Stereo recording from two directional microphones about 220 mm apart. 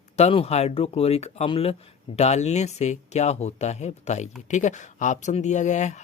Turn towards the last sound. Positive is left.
turn(degrees=35)  # may be behind; listen again after turning